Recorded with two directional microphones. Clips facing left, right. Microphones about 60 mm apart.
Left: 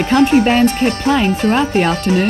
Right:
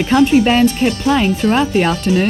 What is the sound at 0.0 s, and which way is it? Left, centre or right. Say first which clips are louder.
Music: even; left.